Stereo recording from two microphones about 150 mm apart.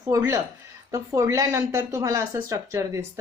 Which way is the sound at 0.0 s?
20° right (ahead or behind).